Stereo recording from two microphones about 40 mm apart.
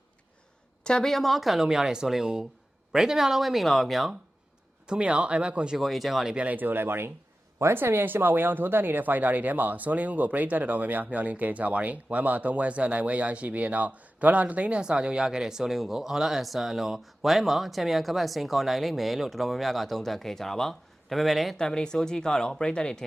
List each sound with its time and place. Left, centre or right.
0.9 s speech: centre
1.1 s speech: centre
4.9 s speech: right
5.7 s speech: centre
6.3 s speech: right
6.6 s speech: right; by 21.5 s centre
21.6 s speech: centre